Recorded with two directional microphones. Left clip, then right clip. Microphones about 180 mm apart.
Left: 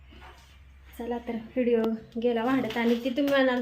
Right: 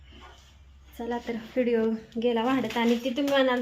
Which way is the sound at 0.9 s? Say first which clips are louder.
Right 1 dB; 5° right (ahead or behind).